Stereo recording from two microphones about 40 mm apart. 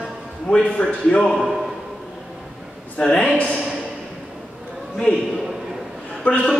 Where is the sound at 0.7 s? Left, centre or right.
Centre.